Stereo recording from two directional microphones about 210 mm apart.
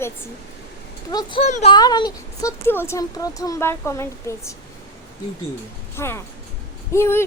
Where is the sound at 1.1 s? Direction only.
20° left (ahead or behind).